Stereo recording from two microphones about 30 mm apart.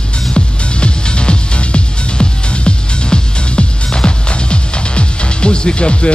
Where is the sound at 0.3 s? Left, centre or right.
Left.